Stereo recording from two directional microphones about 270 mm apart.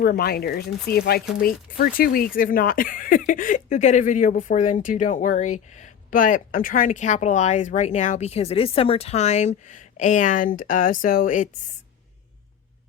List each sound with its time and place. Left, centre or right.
0.0 s speech: left